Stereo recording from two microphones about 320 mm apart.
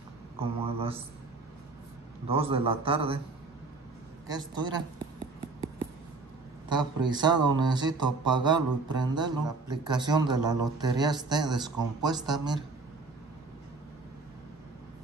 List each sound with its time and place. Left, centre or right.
0.4 s speech: centre
2.2 s speech: centre
4.3 s speech: centre
6.7 s speech: centre